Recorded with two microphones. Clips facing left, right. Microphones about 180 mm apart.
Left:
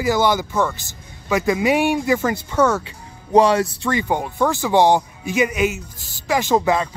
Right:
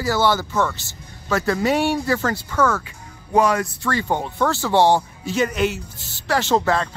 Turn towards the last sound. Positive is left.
turn(degrees=10)  # may be behind; listen again after turning